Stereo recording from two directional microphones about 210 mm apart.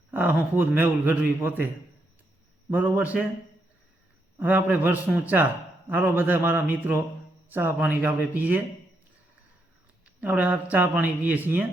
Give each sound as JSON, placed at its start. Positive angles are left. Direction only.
{"t": 0.1, "sound": "a man's voice", "side_deg": -10}
{"t": 4.4, "sound": "a man's voice", "side_deg": -10}
{"t": 10.2, "sound": "a man's voice", "side_deg": -10}